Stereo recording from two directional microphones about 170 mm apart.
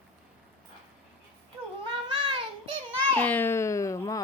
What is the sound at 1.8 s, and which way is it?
Cat, 30° right (ahead or behind).